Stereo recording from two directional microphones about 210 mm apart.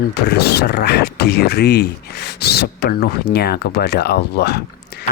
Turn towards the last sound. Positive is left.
turn(degrees=50)  # may be behind; listen again after turning